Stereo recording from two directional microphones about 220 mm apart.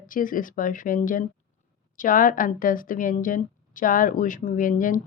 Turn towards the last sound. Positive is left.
turn(degrees=35)  # may be behind; listen again after turning